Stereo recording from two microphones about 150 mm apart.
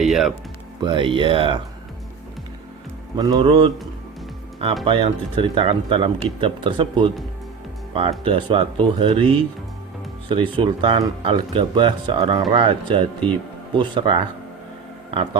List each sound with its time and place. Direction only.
0.0 s speech: centre (ahead or behind)
0.8 s speech: 30° right (ahead or behind)
3.2 s speech: 25° right (ahead or behind)
3.4 s speech: 35° right (ahead or behind)
4.9 s speech: 35° right (ahead or behind)
8.2 s speech: 35° right (ahead or behind)